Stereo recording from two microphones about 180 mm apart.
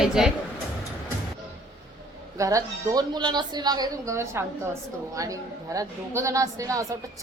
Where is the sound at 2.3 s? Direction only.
20° right (ahead or behind).